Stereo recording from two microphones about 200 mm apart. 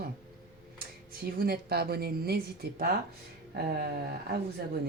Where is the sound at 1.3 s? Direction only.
50° right (ahead or behind).